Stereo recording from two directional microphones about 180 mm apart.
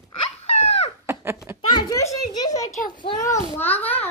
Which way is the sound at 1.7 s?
20° left (ahead or behind).